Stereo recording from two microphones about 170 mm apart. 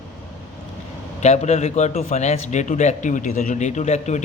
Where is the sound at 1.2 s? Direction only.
40° left (ahead or behind).